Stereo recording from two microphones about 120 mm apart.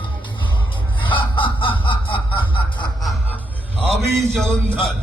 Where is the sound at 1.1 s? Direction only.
45° left (ahead or behind).